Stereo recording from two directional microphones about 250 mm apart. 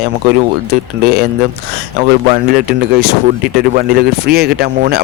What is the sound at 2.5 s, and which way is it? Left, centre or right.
Speech, right.